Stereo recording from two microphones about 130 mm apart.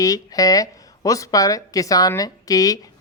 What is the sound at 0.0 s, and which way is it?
Speech, 25° left (ahead or behind).